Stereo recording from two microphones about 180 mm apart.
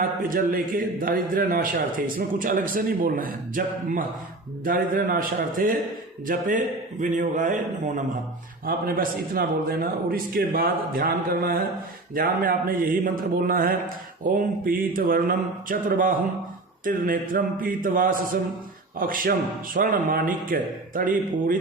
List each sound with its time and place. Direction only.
0.2 s a man's voice: 50° right (ahead or behind)
8.6 s a man's voice: 55° right (ahead or behind)